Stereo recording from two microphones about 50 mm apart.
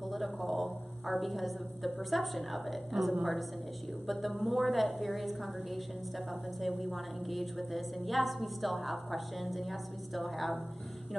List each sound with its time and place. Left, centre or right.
0.1 s a woman's voice: centre